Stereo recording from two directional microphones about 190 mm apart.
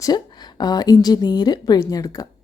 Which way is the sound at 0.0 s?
20° left (ahead or behind).